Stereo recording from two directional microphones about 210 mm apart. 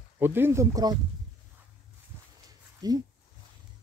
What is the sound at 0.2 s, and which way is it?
Speech, 10° right (ahead or behind).